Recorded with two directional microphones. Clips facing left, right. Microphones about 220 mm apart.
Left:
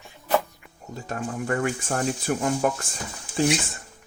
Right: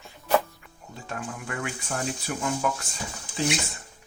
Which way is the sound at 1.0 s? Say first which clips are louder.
Left 6 dB; 40° left (ahead or behind).